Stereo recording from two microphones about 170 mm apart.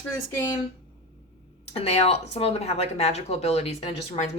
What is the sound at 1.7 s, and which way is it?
A woman's voice, 35° left (ahead or behind).